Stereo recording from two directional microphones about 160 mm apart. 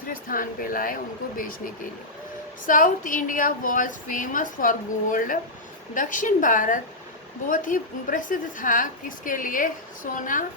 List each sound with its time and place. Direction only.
0.1 s a woman's voice: 60° left (ahead or behind)